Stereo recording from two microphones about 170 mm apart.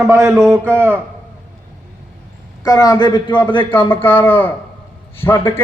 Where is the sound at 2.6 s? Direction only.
25° left (ahead or behind).